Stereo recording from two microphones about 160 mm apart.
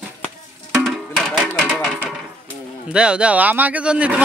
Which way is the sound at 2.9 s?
5° right (ahead or behind).